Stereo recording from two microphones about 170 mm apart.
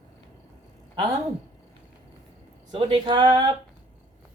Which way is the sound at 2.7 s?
30° right (ahead or behind).